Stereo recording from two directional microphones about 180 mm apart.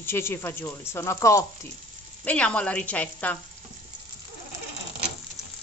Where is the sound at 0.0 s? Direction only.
15° left (ahead or behind).